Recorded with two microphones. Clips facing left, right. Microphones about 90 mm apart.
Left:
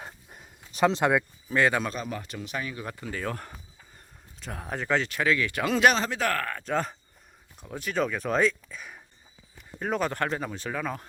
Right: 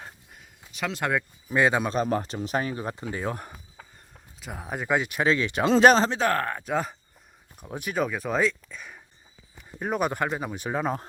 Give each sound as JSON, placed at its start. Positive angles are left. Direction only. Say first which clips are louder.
{"t": 0.7, "sound": "speech", "louder": "left 8 dB", "side_deg": 35}
{"t": 1.5, "sound": "speech", "louder": "right 3 dB", "side_deg": -20}
{"t": 2.0, "sound": "speech", "louder": "right 9 dB", "side_deg": -40}
{"t": 4.4, "sound": "speech", "louder": "right 1 dB", "side_deg": -5}
{"t": 6.7, "sound": "speech", "louder": "right 1 dB", "side_deg": -10}
{"t": 9.6, "sound": "speech", "louder": "right 1 dB", "side_deg": -10}
{"t": 10.7, "sound": "speech", "louder": "right 6 dB", "side_deg": -25}